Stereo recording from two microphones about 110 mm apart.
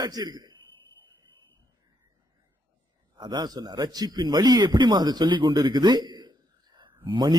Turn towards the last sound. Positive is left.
turn(degrees=-40)  # may be behind; listen again after turning